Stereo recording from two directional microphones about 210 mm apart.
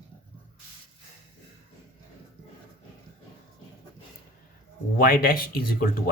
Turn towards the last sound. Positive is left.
turn(degrees=45)  # may be behind; listen again after turning